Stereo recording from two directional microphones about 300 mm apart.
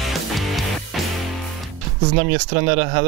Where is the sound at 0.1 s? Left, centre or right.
Centre.